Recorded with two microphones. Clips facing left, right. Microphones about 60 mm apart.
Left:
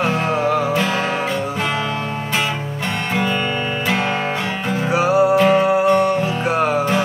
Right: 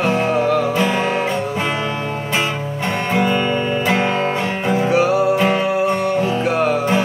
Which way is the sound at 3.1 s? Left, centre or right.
Centre.